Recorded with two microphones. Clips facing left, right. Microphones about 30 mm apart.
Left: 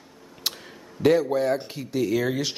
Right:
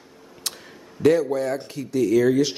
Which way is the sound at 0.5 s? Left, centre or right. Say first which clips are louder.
Even; centre.